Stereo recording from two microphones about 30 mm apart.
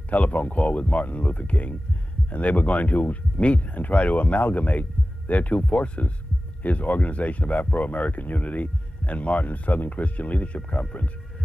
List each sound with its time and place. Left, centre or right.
0.1 s speech: left
3.3 s speech: left
6.6 s speech: left